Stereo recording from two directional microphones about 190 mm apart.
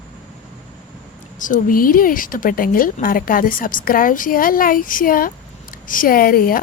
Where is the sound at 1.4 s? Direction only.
45° left (ahead or behind).